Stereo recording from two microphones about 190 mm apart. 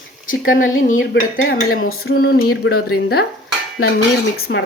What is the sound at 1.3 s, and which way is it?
Speech, 50° left (ahead or behind).